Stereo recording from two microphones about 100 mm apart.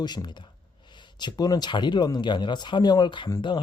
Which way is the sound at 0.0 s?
45° left (ahead or behind).